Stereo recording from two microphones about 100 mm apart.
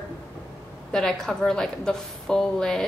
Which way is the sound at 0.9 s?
5° left (ahead or behind).